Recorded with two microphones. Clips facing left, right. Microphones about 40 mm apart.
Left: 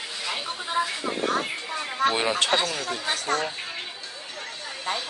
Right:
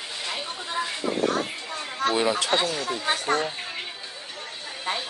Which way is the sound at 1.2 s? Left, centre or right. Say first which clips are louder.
Left 1 dB; centre.